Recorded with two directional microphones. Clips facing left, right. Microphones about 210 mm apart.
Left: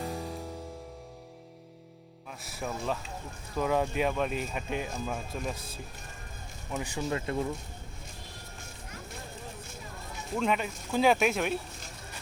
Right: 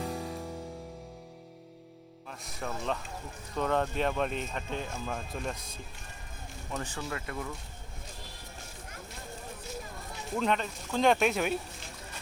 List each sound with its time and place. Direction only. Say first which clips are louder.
0.0 s music: even; centre (ahead or behind)
2.4 s speech: left 2 dB; 5° left (ahead or behind)
7.0 s speech: left 6 dB; 25° left (ahead or behind)
10.3 s speech: left 1 dB; 5° left (ahead or behind)